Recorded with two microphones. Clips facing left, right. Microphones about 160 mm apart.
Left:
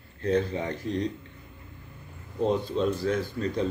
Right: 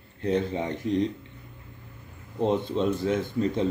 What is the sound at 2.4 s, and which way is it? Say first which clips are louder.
Speech: right 1 dB; 20° right (ahead or behind).